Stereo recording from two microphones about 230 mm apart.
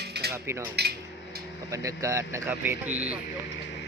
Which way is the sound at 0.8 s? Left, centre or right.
Right.